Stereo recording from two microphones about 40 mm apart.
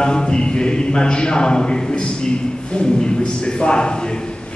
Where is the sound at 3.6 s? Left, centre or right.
Left.